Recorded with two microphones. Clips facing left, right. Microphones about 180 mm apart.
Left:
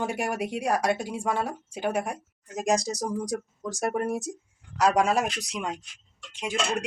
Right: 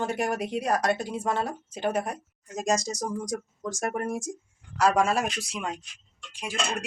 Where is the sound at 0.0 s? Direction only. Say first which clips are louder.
Right 1 dB; 10° left (ahead or behind).